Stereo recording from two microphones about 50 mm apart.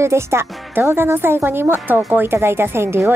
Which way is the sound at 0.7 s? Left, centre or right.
Right.